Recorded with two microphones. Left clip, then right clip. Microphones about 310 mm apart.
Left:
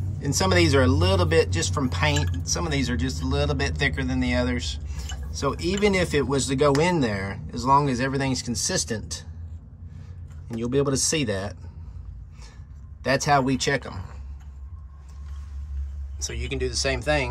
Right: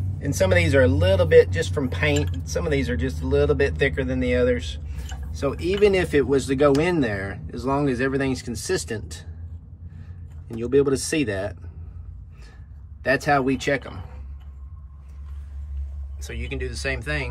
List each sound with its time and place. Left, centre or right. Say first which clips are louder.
0.2 s speech: right 1 dB; centre
10.6 s speech: right 4 dB; centre
13.0 s speech: right 1 dB; centre
16.2 s speech: left 3 dB; centre